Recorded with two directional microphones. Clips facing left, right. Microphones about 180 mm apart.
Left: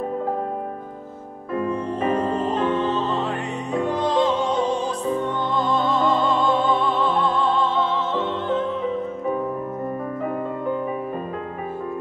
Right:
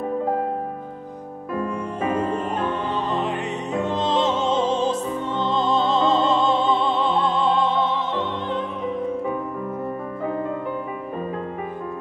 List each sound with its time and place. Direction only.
1.7 s music: 10° right (ahead or behind)